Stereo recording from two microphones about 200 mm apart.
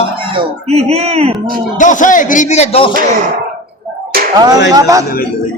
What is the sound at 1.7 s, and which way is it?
A man's voice, 40° left (ahead or behind).